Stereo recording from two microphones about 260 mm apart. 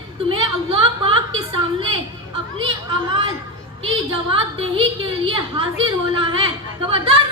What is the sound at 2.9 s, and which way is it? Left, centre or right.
Speech, centre.